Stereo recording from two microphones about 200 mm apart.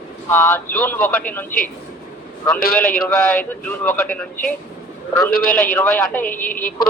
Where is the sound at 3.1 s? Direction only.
5° left (ahead or behind).